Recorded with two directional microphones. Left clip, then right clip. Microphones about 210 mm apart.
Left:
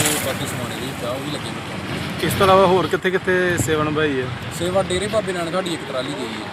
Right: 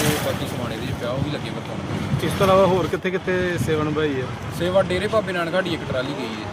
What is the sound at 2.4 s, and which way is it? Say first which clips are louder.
Speech: left 3 dB; 25° left (ahead or behind).